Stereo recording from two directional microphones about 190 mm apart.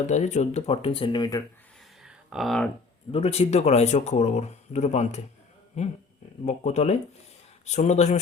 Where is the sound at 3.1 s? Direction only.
35° left (ahead or behind).